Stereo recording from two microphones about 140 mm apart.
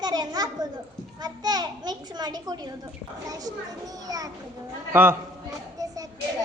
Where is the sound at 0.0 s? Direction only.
30° right (ahead or behind).